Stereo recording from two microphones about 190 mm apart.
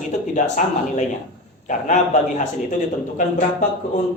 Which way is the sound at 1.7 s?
40° left (ahead or behind).